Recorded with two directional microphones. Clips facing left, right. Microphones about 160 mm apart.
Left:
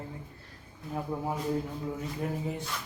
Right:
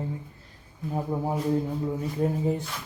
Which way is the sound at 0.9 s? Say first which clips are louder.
Right 4 dB; 30° right (ahead or behind).